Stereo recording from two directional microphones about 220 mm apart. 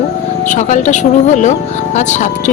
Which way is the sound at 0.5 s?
35° left (ahead or behind).